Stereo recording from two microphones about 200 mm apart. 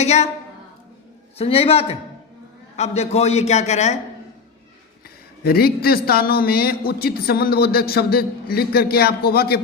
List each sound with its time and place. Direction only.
0.0 s a man's voice: 35° left (ahead or behind)
1.4 s a man's voice: 30° left (ahead or behind)
5.5 s a man's voice: 50° left (ahead or behind)